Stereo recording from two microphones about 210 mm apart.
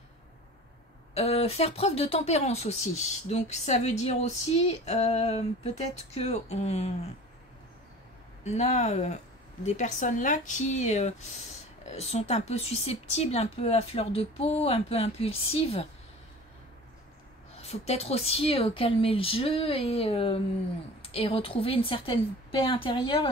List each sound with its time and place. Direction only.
1.1 s speech: 30° left (ahead or behind)
8.5 s speech: 30° left (ahead or behind)
17.6 s speech: 30° left (ahead or behind)